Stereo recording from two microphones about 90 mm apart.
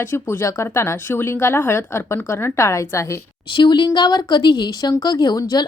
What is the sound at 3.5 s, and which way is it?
Speech, 60° left (ahead or behind).